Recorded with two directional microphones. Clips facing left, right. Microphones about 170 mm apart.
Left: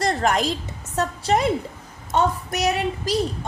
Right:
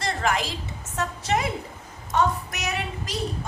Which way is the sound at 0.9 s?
35° left (ahead or behind).